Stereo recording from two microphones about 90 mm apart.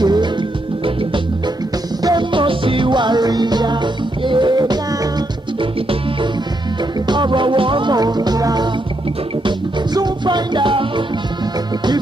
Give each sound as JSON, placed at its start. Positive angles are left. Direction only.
{"t": 0.0, "sound": "music", "side_deg": -50}
{"t": 2.0, "sound": "music", "side_deg": -60}
{"t": 7.1, "sound": "music", "side_deg": -60}
{"t": 9.9, "sound": "music", "side_deg": -55}